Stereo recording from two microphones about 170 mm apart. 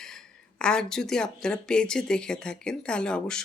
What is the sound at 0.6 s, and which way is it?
Speech, 5° left (ahead or behind).